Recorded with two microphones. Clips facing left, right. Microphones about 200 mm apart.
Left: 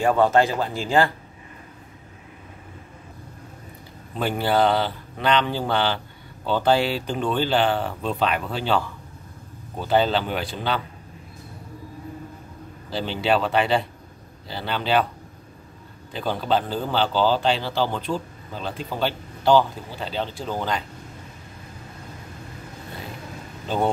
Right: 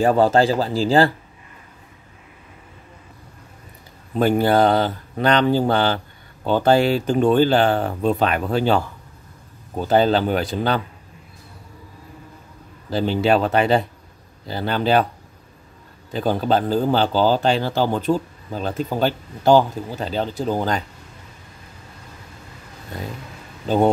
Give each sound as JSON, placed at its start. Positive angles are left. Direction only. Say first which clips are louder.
{"t": 0.0, "sound": "speech", "louder": "right 3 dB", "side_deg": -35}
{"t": 4.2, "sound": "a man's voice", "louder": "right 5 dB", "side_deg": -45}
{"t": 12.9, "sound": "a man's voice", "louder": "right 5 dB", "side_deg": -45}
{"t": 16.1, "sound": "a man's voice", "louder": "right 4 dB", "side_deg": -45}